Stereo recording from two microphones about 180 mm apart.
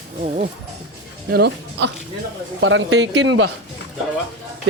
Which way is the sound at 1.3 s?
70° right (ahead or behind).